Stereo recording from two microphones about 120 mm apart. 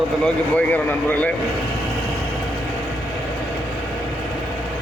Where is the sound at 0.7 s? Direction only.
15° left (ahead or behind).